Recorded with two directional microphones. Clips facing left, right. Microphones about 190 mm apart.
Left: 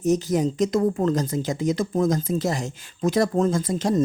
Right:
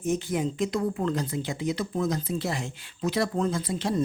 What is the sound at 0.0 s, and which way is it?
Speech, 40° left (ahead or behind).